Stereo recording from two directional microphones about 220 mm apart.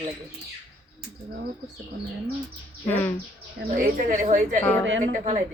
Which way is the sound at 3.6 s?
35° right (ahead or behind).